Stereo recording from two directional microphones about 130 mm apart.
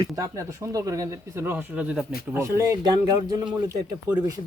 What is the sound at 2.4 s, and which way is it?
Speech, 25° right (ahead or behind).